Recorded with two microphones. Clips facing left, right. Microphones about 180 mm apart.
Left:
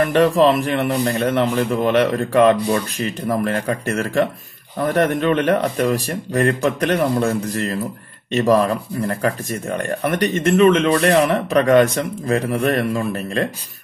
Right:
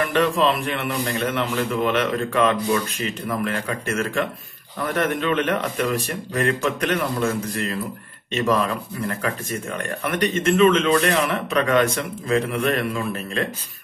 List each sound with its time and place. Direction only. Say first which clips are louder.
0.0 s speech: left 6 dB; 45° left (ahead or behind)